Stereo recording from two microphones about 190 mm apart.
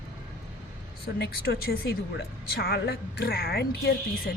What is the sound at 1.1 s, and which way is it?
A woman's voice, 55° left (ahead or behind).